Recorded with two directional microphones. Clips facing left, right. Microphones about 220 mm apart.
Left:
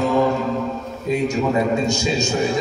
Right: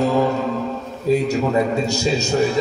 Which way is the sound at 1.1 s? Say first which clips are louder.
Right 4 dB; 35° right (ahead or behind).